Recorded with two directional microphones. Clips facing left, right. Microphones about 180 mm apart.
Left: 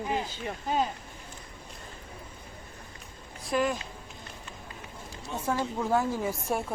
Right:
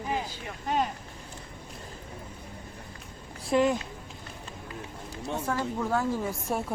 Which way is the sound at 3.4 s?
25° right (ahead or behind).